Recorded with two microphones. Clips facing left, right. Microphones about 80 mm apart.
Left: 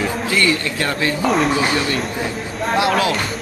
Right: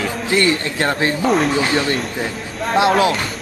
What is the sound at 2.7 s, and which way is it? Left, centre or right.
Speech, right.